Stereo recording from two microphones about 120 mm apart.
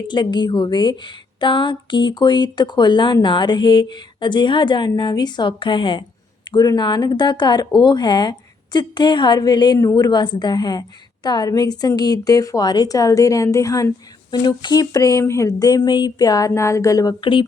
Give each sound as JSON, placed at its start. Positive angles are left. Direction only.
{"t": 0.1, "sound": "a woman's voice", "side_deg": 40}
{"t": 17.2, "sound": "speech", "side_deg": 45}